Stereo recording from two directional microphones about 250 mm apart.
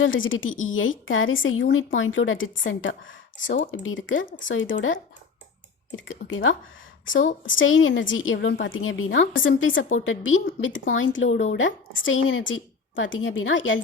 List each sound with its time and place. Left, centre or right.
0.0 s a woman's voice: left
6.1 s a woman's voice: left